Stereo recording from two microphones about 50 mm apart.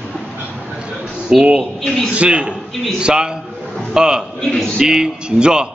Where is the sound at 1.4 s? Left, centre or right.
Right.